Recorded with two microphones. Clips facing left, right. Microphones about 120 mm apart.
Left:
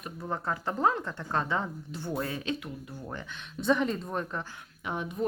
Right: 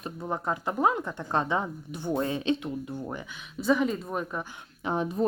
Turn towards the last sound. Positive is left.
turn(degrees=-35)  # may be behind; listen again after turning